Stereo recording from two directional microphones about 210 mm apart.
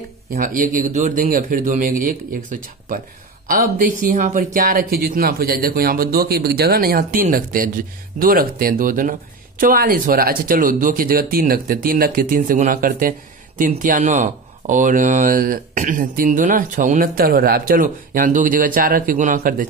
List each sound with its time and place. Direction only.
0.3 s speech: 40° right (ahead or behind)